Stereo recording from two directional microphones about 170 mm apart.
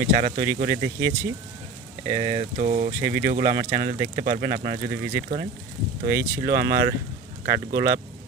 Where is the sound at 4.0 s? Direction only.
55° right (ahead or behind).